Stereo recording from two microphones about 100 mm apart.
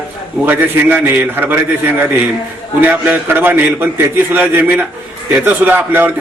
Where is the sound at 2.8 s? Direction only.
20° right (ahead or behind).